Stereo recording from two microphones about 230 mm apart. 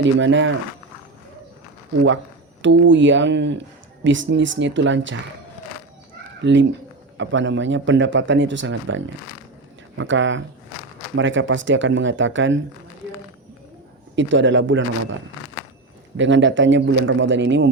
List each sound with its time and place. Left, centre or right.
0.2 s speech: right
2.6 s speech: right
6.4 s speech: right
14.2 s speech: right
16.1 s speech: right